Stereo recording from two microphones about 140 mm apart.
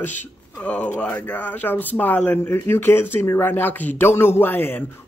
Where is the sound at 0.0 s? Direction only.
15° left (ahead or behind).